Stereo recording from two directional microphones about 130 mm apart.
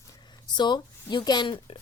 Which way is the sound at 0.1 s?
35° left (ahead or behind).